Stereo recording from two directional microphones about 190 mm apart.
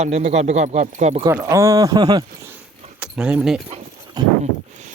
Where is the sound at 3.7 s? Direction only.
25° right (ahead or behind).